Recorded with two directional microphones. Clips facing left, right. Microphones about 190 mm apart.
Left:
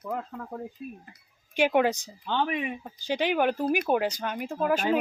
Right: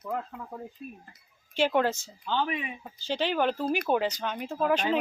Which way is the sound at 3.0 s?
15° left (ahead or behind).